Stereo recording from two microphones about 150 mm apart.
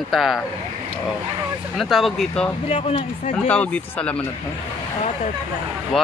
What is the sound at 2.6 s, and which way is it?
Speech, 40° left (ahead or behind).